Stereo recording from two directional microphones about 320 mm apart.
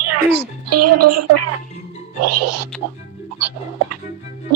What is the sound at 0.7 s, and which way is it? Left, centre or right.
Speech, right.